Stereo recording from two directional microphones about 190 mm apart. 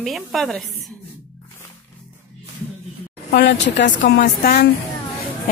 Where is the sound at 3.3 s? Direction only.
65° left (ahead or behind).